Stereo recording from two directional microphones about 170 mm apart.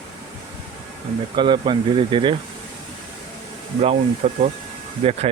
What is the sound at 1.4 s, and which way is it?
Speech, 25° right (ahead or behind).